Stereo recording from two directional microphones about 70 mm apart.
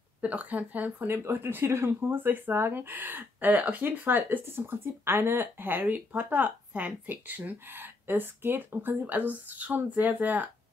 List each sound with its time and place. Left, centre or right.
0.2 s speech: right